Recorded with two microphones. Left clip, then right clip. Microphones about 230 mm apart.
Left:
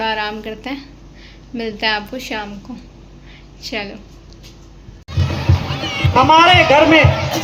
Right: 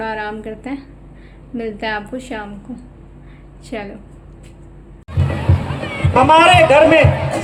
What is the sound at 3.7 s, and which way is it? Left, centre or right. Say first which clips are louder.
Speech: left 3 dB; centre.